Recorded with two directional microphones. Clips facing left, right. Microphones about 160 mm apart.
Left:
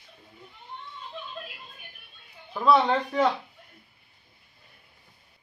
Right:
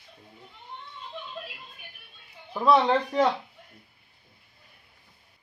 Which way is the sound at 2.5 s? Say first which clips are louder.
Even; 15° right (ahead or behind).